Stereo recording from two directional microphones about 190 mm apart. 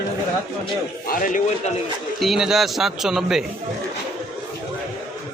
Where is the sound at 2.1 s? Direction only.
Centre (ahead or behind).